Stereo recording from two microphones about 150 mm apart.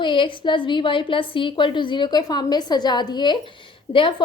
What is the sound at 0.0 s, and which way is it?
A woman's voice, 35° left (ahead or behind).